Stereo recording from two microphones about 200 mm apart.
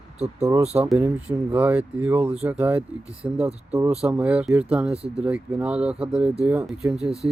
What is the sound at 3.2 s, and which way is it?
Speech, 30° right (ahead or behind).